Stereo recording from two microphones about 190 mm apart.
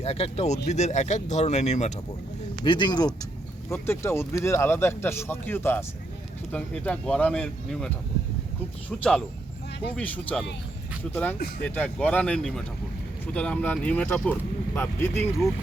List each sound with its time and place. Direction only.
0.0 s speech: 35° left (ahead or behind)
2.6 s speech: 25° left (ahead or behind); by 7.9 s 5° left (ahead or behind)
9.9 s speech: 5° left (ahead or behind)